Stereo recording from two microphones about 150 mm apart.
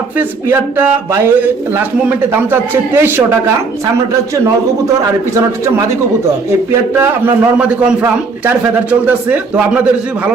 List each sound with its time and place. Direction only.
0.2 s a man's voice: 15° right (ahead or behind)
6.9 s a man's voice: 15° right (ahead or behind)